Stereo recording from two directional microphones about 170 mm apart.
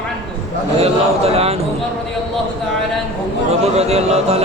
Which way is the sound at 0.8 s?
35° right (ahead or behind).